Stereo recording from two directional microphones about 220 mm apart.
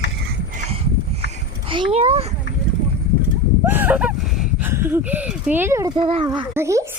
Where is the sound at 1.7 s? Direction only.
25° right (ahead or behind).